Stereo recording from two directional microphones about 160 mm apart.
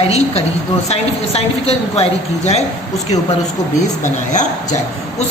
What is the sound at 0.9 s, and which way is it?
A woman's voice, 40° left (ahead or behind).